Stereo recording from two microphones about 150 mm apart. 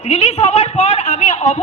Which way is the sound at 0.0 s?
45° left (ahead or behind).